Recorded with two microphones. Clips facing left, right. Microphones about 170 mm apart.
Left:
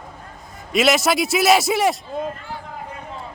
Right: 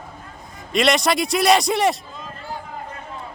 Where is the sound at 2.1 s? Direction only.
55° left (ahead or behind).